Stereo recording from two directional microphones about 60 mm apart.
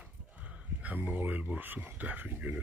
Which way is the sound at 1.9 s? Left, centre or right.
Right.